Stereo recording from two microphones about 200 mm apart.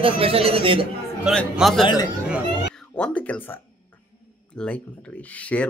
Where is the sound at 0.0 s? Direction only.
30° right (ahead or behind).